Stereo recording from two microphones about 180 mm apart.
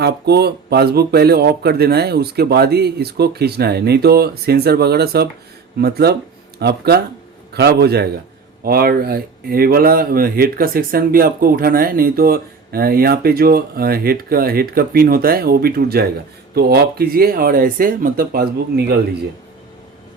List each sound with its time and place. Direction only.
0.0 s speech: 65° right (ahead or behind)